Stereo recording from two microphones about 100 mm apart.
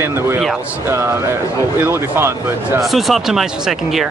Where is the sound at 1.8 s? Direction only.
25° right (ahead or behind).